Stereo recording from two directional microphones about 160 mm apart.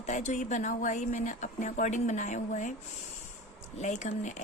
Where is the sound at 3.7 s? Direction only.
45° left (ahead or behind).